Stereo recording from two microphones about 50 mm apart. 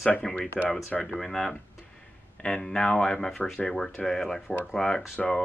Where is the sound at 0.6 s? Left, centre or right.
Centre.